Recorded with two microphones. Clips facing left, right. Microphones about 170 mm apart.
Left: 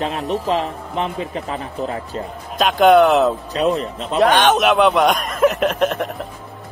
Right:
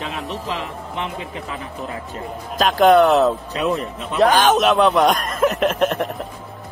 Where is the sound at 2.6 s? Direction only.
Centre (ahead or behind).